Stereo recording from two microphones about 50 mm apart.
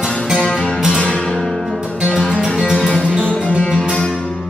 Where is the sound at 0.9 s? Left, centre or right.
Centre.